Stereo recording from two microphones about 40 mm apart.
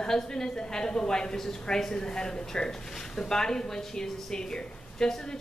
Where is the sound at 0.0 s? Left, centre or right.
Centre.